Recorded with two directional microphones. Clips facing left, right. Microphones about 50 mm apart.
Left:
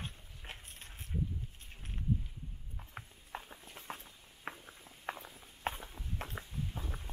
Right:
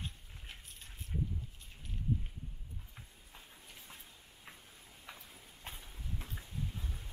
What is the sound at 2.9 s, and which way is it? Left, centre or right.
Clip-clop, left.